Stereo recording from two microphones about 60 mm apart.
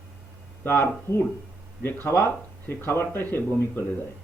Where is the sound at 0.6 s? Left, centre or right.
Left.